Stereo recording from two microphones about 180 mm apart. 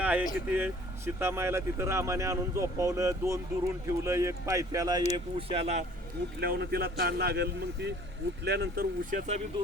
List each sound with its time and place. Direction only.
0.0 s a sound: 5° right (ahead or behind)
0.4 s speech: 10° right (ahead or behind)
5.1 s speech: 35° right (ahead or behind)
6.4 s a man's voice: 60° right (ahead or behind); by 9.4 s 40° right (ahead or behind)